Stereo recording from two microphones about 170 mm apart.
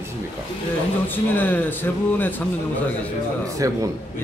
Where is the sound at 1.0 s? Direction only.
10° left (ahead or behind).